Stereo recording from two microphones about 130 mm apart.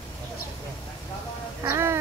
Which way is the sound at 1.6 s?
20° right (ahead or behind).